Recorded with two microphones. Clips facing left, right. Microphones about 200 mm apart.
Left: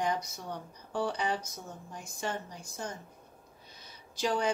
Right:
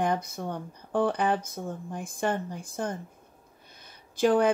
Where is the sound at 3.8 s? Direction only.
55° right (ahead or behind).